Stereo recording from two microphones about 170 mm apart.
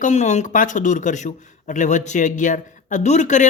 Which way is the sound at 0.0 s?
45° left (ahead or behind).